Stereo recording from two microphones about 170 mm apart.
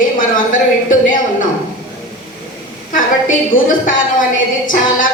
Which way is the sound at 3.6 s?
50° left (ahead or behind).